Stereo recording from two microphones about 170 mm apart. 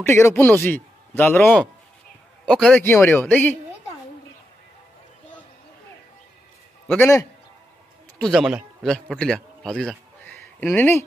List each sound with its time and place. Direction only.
0.0 s a man's voice: 15° left (ahead or behind)
7.0 s speech: 15° left (ahead or behind)
8.2 s a man's voice: centre (ahead or behind)